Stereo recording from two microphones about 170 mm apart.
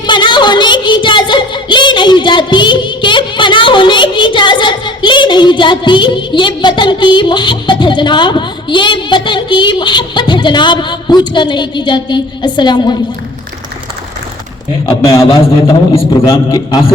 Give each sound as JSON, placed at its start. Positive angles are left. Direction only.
{"t": 0.1, "sound": "child singing", "side_deg": 30}
{"t": 14.8, "sound": "a man's voice", "side_deg": 20}